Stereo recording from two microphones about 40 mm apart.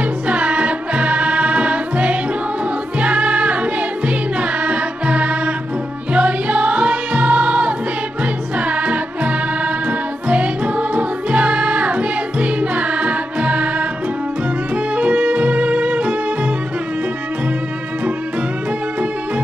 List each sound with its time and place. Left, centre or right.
0.3 s music: right
15.0 s music: right